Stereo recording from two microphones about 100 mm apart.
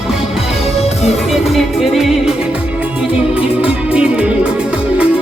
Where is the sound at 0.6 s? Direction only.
90° left.